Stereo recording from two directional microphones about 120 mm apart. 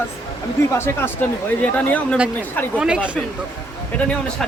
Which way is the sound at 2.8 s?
10° right (ahead or behind).